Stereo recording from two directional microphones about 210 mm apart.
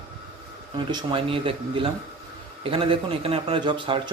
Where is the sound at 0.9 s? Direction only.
20° right (ahead or behind).